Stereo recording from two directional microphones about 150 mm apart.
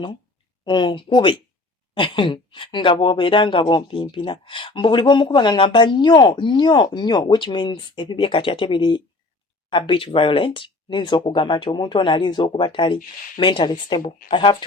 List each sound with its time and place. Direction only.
0.6 s speech: 30° left (ahead or behind)